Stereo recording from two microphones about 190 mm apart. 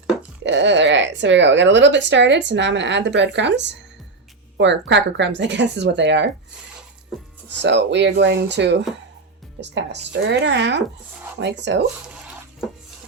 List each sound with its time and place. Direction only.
0.4 s a woman's voice: 70° right (ahead or behind)
7.6 s a woman's voice: 65° right (ahead or behind)